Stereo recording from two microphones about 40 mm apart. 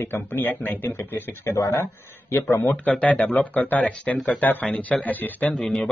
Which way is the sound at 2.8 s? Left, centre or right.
Left.